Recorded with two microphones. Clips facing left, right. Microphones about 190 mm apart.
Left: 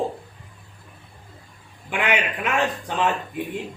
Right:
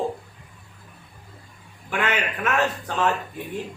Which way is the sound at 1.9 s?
15° left (ahead or behind).